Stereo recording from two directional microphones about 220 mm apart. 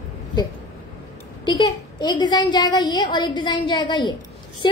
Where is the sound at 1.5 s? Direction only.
20° left (ahead or behind).